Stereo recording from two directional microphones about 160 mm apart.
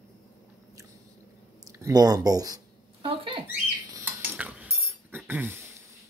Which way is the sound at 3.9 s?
15° right (ahead or behind).